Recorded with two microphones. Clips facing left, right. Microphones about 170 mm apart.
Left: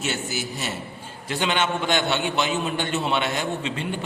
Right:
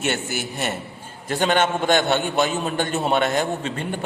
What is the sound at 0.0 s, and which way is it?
A man's voice, 60° right (ahead or behind).